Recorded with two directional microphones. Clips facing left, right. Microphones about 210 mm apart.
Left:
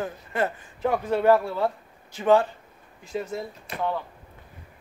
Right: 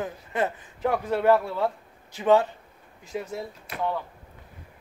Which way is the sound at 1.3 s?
10° left (ahead or behind).